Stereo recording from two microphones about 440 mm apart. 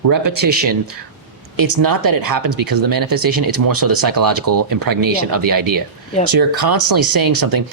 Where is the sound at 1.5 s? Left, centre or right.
Right.